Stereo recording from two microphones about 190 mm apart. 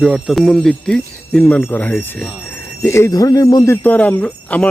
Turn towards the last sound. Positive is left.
turn(degrees=5)  # may be behind; listen again after turning